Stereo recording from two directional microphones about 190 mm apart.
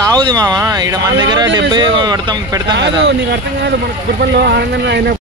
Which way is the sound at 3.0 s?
60° right (ahead or behind).